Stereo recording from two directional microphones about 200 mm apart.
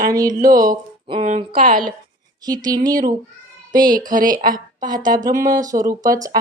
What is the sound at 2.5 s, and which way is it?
Speech, 20° right (ahead or behind).